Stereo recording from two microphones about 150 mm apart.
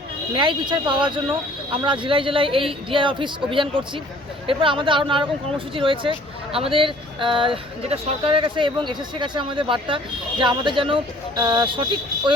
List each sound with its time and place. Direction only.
0.3 s speech: 30° right (ahead or behind)